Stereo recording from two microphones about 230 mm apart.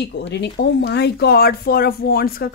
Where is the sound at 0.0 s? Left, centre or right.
Left.